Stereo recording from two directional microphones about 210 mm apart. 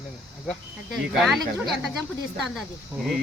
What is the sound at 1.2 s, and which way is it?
Speech, centre (ahead or behind).